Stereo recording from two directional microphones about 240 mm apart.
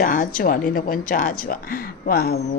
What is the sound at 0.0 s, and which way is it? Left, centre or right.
Speech, left.